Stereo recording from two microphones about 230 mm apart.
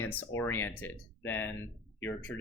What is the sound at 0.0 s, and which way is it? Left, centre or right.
Speech, centre.